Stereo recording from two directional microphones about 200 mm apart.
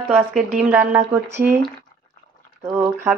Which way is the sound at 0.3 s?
5° right (ahead or behind).